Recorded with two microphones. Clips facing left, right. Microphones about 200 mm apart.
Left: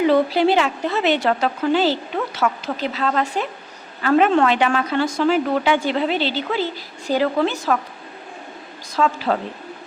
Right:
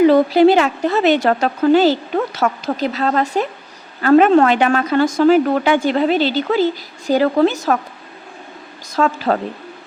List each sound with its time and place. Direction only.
0.1 s a woman's voice: 45° right (ahead or behind)
9.0 s a woman's voice: 45° right (ahead or behind)